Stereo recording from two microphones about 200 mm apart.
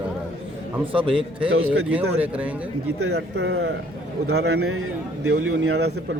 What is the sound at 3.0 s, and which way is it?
Speech, 55° right (ahead or behind).